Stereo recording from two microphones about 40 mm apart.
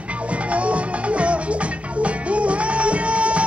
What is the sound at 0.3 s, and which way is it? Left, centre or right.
Music, right.